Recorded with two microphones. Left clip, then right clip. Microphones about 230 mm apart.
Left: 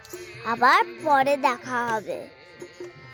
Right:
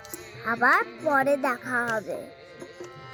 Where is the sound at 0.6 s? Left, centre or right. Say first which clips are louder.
Left 3 dB; left.